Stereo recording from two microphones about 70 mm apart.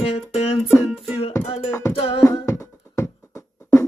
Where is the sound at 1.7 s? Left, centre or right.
Left.